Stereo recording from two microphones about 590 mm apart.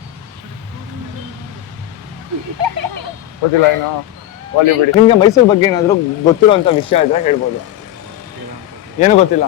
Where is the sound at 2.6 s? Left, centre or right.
Right.